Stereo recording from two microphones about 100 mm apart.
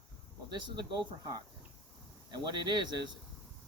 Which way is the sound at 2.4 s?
50° right (ahead or behind).